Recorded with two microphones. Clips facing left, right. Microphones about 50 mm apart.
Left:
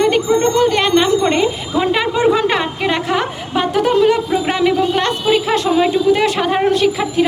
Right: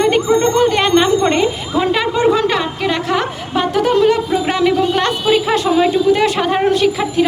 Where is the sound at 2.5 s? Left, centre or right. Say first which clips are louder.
Even; centre.